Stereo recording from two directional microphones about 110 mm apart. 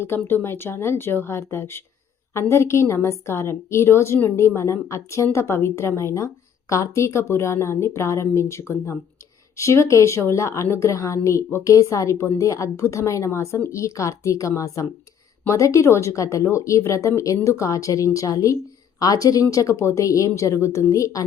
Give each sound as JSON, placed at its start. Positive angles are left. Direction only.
{"t": 0.3, "sound": "a woman's voice", "side_deg": 20}